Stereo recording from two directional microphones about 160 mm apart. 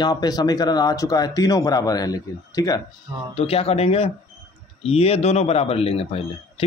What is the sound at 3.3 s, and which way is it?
Speech, 40° left (ahead or behind).